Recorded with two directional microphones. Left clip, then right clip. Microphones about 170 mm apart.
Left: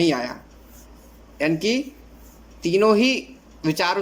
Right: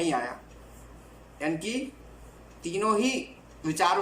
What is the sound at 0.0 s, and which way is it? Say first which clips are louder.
Speech: left 7 dB; 65° left (ahead or behind).